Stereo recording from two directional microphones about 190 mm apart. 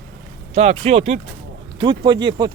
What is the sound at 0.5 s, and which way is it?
Speech, 35° right (ahead or behind).